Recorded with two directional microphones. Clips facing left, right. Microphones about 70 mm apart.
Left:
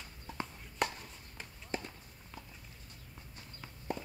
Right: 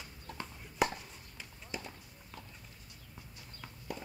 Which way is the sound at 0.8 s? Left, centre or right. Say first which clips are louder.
Right 3 dB; centre.